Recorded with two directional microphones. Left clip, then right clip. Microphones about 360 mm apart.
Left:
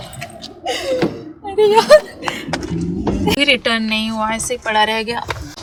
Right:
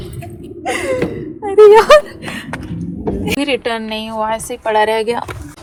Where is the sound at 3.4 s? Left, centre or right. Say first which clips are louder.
Left 5 dB; centre.